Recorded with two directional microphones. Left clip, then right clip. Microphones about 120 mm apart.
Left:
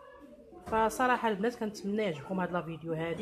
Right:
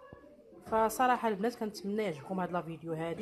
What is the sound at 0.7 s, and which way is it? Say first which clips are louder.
A woman's voice: even; 20° right (ahead or behind).